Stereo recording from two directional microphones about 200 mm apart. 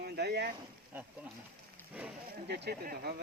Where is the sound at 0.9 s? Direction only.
10° right (ahead or behind).